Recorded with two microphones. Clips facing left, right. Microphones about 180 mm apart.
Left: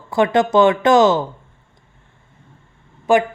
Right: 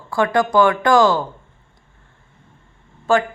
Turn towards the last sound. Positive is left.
turn(degrees=15)  # may be behind; listen again after turning